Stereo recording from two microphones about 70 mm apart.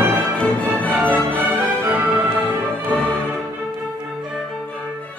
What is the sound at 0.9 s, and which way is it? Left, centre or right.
Music, right.